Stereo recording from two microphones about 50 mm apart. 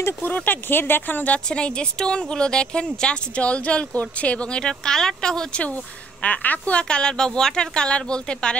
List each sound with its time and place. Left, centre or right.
0.2 s speech: left
1.5 s speech: centre
6.2 s speech: left